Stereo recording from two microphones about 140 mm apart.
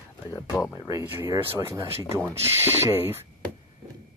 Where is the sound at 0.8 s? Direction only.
20° right (ahead or behind).